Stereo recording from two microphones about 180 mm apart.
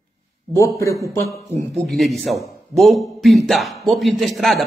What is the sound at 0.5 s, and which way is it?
Speech, 15° left (ahead or behind).